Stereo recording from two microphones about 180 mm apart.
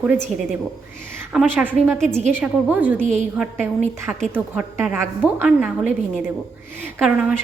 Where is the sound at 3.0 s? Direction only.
40° right (ahead or behind).